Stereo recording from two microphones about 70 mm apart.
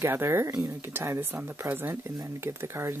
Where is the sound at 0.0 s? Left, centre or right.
Right.